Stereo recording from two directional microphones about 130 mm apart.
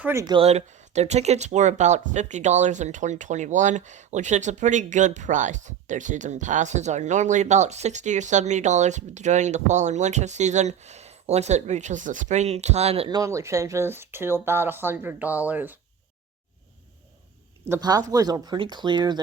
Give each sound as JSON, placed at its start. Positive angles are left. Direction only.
{"t": 0.0, "sound": "speech", "side_deg": -20}
{"t": 0.3, "sound": "speech", "side_deg": -50}
{"t": 13.1, "sound": "speech", "side_deg": -25}
{"t": 17.7, "sound": "speech", "side_deg": -30}